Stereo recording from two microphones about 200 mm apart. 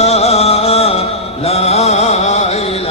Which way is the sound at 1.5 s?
30° left (ahead or behind).